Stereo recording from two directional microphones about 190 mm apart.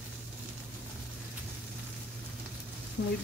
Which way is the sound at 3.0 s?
55° left (ahead or behind).